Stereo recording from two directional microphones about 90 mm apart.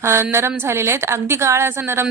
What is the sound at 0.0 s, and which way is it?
Speech, 30° right (ahead or behind).